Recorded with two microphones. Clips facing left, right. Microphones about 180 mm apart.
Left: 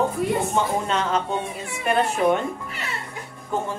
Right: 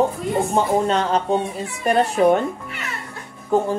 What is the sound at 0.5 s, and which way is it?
Speech, 35° right (ahead or behind).